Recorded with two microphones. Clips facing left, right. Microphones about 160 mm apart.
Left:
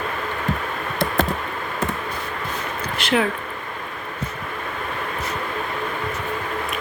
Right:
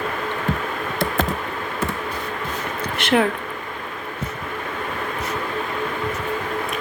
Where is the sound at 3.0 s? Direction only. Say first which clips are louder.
Right 2 dB; 55° right (ahead or behind).